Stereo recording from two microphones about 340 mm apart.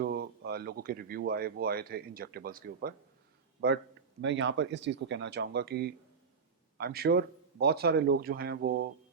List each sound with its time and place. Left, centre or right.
0.0 s speech: right
4.2 s speech: right